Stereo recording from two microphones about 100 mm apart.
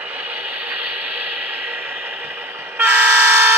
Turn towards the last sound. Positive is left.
turn(degrees=-20)  # may be behind; listen again after turning